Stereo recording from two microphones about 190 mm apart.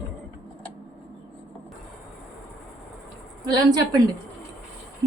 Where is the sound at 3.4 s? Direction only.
20° right (ahead or behind).